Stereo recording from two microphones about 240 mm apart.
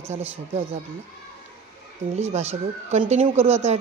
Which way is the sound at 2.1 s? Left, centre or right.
Right.